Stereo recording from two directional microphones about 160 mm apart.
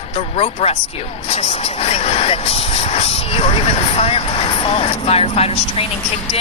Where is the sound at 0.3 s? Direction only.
40° left (ahead or behind).